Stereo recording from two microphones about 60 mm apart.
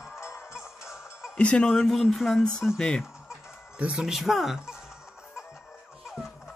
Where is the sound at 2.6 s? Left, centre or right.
Centre.